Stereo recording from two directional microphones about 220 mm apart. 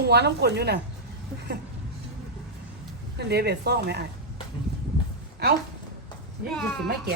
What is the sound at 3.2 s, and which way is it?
Speech, 50° right (ahead or behind).